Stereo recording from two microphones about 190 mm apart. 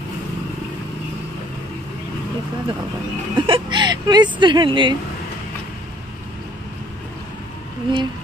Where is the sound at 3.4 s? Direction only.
25° right (ahead or behind).